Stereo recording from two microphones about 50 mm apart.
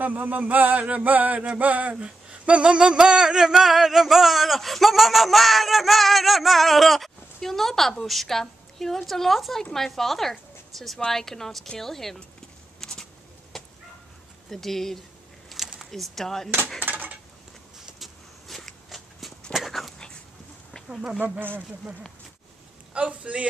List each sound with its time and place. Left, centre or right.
0.0 s a sound: right
2.0 s a sound: right; by 10.9 s centre
11.1 s speech: centre
11.8 s a sound: centre
13.5 s bow-wow: centre
14.5 s speech: centre
15.6 s a sound: centre
15.9 s speech: centre
16.8 s cutlery: right
17.8 s walk: centre
19.5 s dog: centre
22.9 s a man's voice: right